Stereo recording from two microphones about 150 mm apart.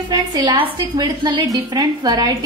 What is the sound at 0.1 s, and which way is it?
A woman's voice, 25° right (ahead or behind).